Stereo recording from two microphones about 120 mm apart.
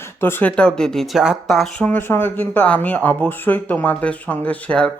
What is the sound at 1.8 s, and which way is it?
Speech, 15° left (ahead or behind).